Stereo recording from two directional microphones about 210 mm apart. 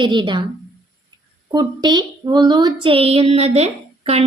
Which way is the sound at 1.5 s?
20° right (ahead or behind).